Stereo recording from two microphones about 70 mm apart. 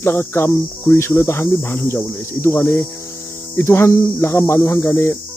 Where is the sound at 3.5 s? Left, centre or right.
Left.